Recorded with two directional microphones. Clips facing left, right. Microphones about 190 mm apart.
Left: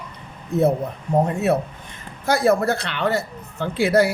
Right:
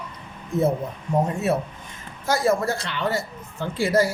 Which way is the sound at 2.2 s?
65° left (ahead or behind).